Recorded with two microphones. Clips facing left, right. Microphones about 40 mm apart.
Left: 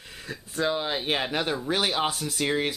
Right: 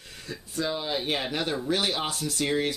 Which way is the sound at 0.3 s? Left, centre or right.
Left.